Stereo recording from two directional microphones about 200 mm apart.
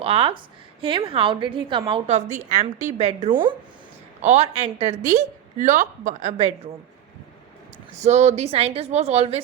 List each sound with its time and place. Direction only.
0.0 s a woman's voice: 30° right (ahead or behind)
7.9 s a woman's voice: 35° right (ahead or behind)